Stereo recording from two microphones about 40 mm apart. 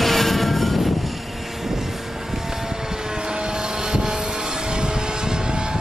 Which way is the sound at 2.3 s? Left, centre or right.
Centre.